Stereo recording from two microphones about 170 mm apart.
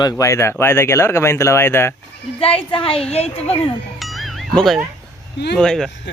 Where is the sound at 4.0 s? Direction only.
Centre (ahead or behind).